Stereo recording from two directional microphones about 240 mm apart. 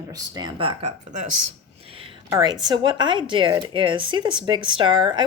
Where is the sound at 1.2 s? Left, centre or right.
Right.